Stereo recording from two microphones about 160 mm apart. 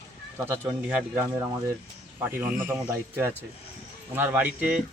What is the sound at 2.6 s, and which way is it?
Speech, 15° right (ahead or behind).